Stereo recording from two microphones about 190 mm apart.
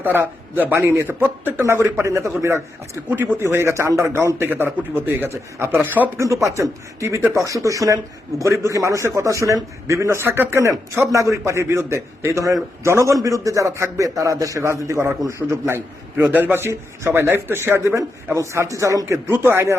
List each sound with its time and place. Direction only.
0.0 s speech: 10° right (ahead or behind)